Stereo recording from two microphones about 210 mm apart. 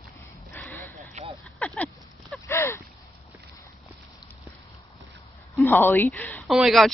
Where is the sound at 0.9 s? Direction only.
30° right (ahead or behind).